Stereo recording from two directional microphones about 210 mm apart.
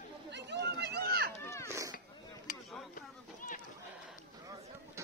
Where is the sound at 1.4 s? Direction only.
15° left (ahead or behind).